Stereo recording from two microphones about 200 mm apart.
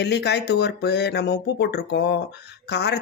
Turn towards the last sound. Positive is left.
turn(degrees=55)  # may be behind; listen again after turning